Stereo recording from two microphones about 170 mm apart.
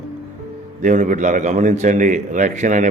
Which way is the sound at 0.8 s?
50° right (ahead or behind).